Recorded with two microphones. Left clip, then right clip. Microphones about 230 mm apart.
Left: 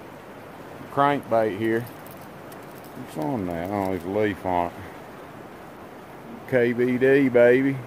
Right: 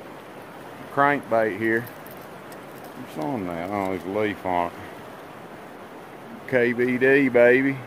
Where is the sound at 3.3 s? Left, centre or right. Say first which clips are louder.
Even; centre.